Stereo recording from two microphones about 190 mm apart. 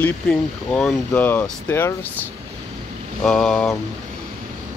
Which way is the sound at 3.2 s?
5° left (ahead or behind).